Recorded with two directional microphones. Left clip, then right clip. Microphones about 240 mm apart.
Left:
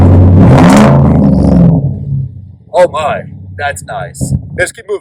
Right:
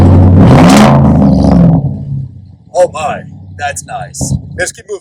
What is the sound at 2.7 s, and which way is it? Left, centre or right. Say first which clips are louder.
Speech: left 2 dB; centre.